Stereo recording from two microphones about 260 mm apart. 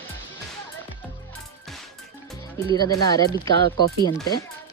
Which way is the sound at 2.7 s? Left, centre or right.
Centre.